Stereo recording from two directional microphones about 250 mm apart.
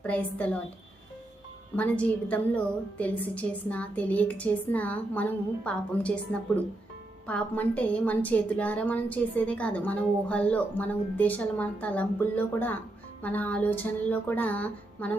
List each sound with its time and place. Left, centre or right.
0.0 s a woman's voice: centre
1.7 s a woman's voice: centre